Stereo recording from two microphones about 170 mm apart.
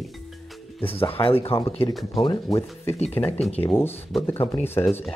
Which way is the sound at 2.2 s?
20° left (ahead or behind).